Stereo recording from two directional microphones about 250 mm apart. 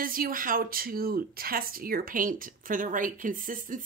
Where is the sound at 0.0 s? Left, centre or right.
Right.